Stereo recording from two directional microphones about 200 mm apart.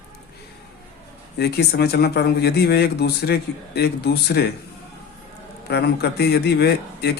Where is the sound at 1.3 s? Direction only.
55° left (ahead or behind).